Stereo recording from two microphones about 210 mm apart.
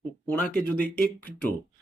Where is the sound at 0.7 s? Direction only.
5° left (ahead or behind).